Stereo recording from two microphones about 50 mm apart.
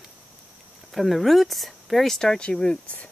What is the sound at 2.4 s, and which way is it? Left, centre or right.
Speech, centre.